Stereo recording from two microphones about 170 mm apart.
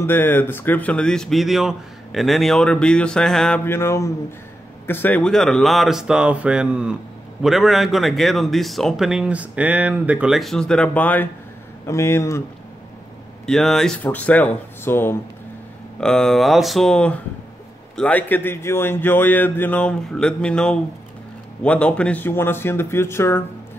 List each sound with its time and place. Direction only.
0.0 s speech: 10° left (ahead or behind)
13.5 s speech: centre (ahead or behind)